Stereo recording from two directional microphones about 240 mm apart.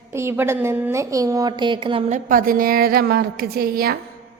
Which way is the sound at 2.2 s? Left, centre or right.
Right.